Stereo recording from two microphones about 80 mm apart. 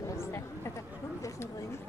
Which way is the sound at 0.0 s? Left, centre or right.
Left.